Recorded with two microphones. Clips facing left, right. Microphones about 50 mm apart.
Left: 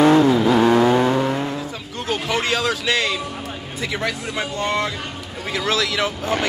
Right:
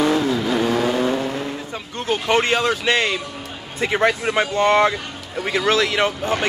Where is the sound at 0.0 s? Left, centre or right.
Left.